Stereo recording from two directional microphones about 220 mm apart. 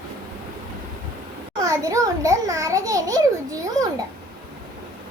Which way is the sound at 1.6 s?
15° right (ahead or behind).